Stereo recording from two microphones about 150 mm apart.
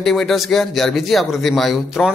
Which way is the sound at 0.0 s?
Centre (ahead or behind).